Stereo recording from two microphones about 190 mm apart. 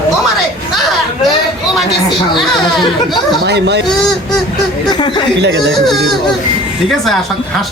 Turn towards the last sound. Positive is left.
turn(degrees=0)  # may be behind; listen again after turning